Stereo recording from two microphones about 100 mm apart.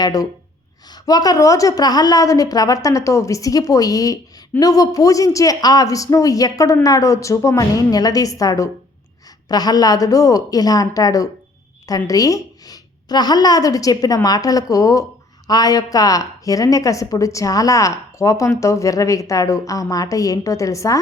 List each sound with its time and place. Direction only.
0.0 s a woman's voice: 35° left (ahead or behind)